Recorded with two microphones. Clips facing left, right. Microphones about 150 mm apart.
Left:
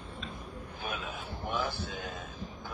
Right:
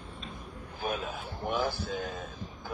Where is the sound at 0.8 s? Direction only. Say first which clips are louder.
Right 5 dB; 40° right (ahead or behind).